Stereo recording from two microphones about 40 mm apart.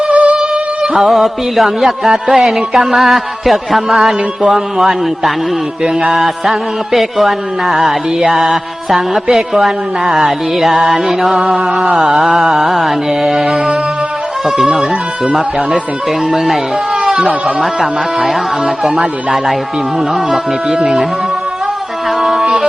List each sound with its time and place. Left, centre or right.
0.1 s music: right
0.3 s music: centre
0.9 s music: centre
15.3 s music: centre
16.3 s speech: centre
17.2 s speech: right
17.6 s music: centre
18.9 s speech: right
20.7 s speech: right
22.2 s music: centre